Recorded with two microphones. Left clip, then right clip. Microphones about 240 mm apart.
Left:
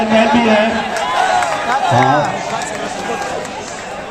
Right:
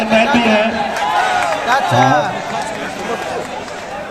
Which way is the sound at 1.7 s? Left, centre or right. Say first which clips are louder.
Even; right.